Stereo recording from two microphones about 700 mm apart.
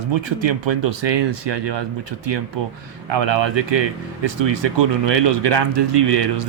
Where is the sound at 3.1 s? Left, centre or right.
Right.